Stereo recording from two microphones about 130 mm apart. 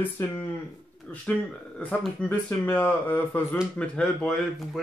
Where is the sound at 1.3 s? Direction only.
10° left (ahead or behind).